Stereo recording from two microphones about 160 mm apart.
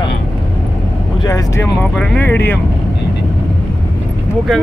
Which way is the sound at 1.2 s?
20° left (ahead or behind).